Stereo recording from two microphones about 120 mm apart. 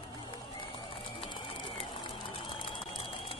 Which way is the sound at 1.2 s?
50° left (ahead or behind).